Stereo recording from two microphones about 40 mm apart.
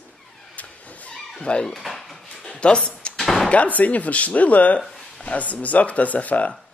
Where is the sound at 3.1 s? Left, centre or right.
Centre.